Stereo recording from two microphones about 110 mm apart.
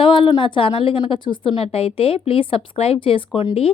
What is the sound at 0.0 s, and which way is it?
Speech, 50° left (ahead or behind).